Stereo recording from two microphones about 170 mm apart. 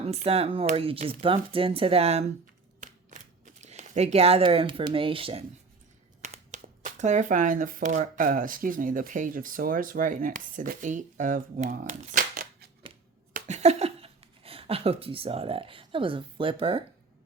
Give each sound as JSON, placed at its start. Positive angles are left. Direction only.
{"t": 0.0, "sound": "speech", "side_deg": -35}
{"t": 2.8, "sound": "a sound", "side_deg": -45}
{"t": 6.2, "sound": "speech", "side_deg": -45}
{"t": 13.3, "sound": "speech", "side_deg": -40}